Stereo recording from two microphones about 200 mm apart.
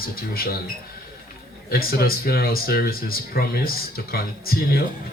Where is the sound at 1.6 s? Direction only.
50° left (ahead or behind).